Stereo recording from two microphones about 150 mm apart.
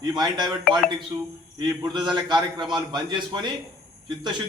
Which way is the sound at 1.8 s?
30° right (ahead or behind).